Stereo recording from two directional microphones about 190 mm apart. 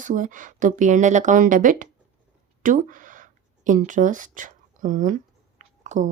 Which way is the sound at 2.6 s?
45° right (ahead or behind).